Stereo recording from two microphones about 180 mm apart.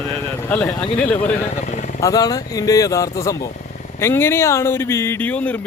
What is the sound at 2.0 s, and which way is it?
Speech, 20° left (ahead or behind).